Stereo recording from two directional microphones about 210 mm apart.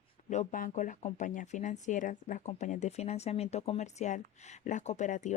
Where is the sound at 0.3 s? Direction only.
35° left (ahead or behind).